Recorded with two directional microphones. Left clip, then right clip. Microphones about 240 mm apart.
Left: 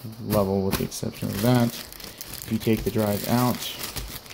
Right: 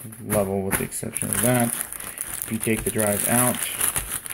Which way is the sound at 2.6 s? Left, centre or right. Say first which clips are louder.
Right 1 dB; centre.